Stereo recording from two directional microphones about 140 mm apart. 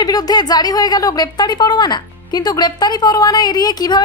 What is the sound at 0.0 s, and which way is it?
Speech, 30° left (ahead or behind).